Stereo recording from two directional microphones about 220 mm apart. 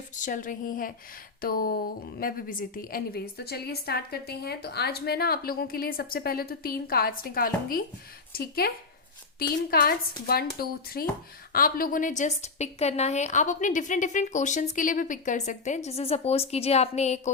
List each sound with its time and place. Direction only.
0.2 s a woman's voice: 35° left (ahead or behind)